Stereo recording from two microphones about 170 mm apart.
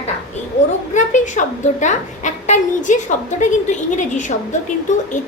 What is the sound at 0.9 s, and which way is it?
A woman's voice, 45° left (ahead or behind).